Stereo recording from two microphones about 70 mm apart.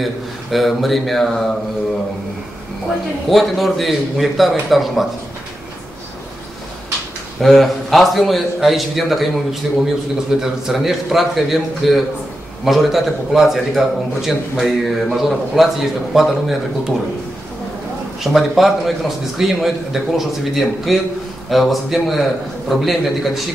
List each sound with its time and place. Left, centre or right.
0.0 s a man's voice: centre
3.3 s a man's voice: centre
7.4 s a man's voice: centre
18.2 s a man's voice: centre